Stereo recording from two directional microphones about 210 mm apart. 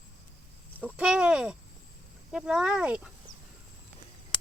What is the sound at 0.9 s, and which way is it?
Speech, 5° right (ahead or behind).